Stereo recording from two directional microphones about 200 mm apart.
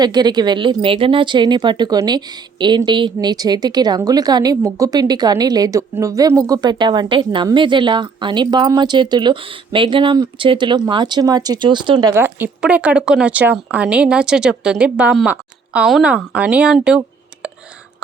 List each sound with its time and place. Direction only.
0.0 s speech: 20° right (ahead or behind); by 17.0 s 5° right (ahead or behind)